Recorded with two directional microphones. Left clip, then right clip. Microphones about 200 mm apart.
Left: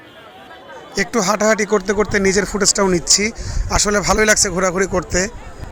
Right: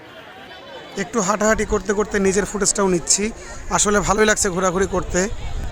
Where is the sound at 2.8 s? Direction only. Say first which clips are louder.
Left 4 dB; centre (ahead or behind).